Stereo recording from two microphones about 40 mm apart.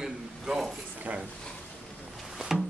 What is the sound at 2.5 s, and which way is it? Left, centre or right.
Music, centre.